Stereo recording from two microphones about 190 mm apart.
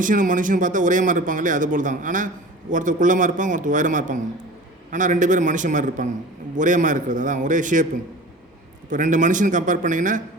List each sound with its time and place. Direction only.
0.0 s a man's voice: 45° right (ahead or behind)
8.9 s speech: 40° right (ahead or behind)